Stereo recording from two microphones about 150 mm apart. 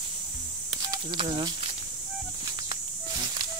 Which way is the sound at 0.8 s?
30° right (ahead or behind).